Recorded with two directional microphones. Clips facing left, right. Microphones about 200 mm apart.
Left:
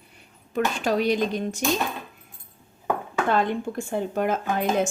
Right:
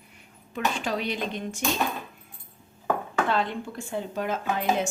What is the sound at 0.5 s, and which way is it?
Speech, 45° left (ahead or behind).